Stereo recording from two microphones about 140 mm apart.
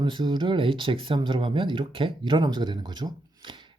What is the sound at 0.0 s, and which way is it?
Speech, 35° right (ahead or behind).